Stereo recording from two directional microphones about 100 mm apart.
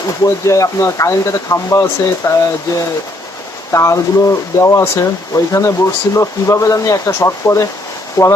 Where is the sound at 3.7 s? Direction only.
30° left (ahead or behind).